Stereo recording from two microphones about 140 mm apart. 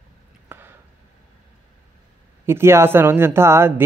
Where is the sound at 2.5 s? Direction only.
15° right (ahead or behind).